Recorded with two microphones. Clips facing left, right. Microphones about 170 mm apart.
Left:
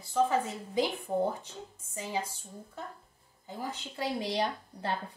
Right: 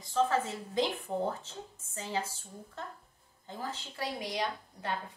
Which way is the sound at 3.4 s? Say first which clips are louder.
Left 1 dB; 10° left (ahead or behind).